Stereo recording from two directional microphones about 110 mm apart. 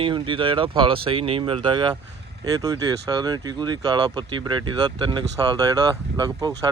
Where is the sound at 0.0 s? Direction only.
50° right (ahead or behind).